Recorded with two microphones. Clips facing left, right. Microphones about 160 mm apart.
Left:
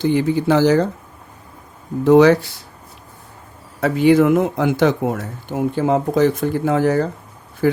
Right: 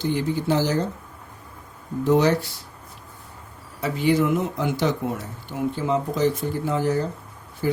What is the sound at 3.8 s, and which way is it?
Speech, 60° left (ahead or behind).